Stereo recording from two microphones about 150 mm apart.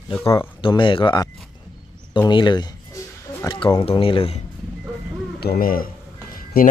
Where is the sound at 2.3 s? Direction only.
30° left (ahead or behind).